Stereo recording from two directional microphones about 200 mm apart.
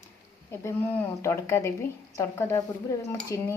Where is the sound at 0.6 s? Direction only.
10° left (ahead or behind).